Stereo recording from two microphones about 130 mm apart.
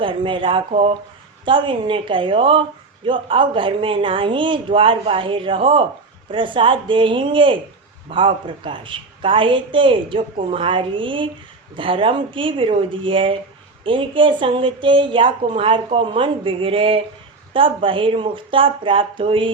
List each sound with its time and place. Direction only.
0.0 s a woman's voice: 40° right (ahead or behind)
0.7 s speech: 55° right (ahead or behind)
1.5 s a woman's voice: 40° right (ahead or behind)